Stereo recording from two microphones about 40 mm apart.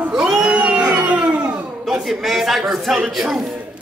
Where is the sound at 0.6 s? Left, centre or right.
Right.